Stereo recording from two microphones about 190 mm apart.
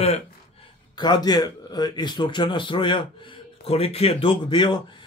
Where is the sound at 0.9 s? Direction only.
20° left (ahead or behind).